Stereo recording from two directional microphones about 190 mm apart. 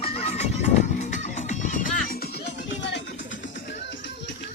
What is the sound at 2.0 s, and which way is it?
Music, 55° left (ahead or behind).